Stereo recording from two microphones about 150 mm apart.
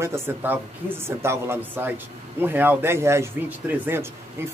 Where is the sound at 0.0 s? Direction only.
15° right (ahead or behind).